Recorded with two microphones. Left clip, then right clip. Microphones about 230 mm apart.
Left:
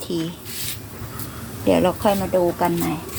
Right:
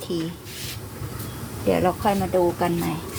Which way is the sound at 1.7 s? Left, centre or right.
Left.